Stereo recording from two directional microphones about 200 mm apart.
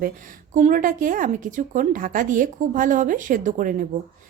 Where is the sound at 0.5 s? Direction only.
40° right (ahead or behind).